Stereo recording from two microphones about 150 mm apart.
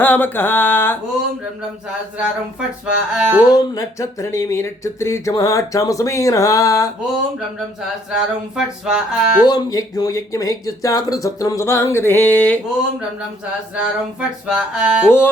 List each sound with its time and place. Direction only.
0.0 s a sound: 10° left (ahead or behind)
2.1 s music: 5° right (ahead or behind)
3.5 s speech: 25° left (ahead or behind)
8.1 s speech: 5° right (ahead or behind)
9.5 s speech: 25° left (ahead or behind)
13.7 s music: 5° right (ahead or behind)
15.0 s a sound: 15° left (ahead or behind)